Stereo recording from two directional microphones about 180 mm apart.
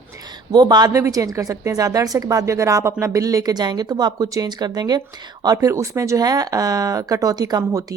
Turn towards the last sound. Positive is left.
turn(degrees=-20)  # may be behind; listen again after turning